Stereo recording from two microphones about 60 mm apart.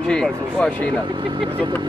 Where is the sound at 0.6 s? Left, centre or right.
Left.